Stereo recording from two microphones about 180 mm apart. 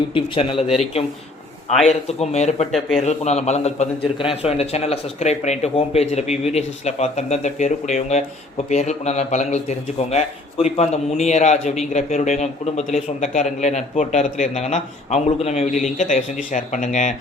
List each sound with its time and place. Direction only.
0.1 s speech: 30° left (ahead or behind)
1.9 s a man's voice: 35° left (ahead or behind)